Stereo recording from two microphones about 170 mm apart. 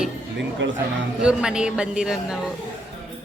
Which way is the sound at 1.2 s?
5° right (ahead or behind).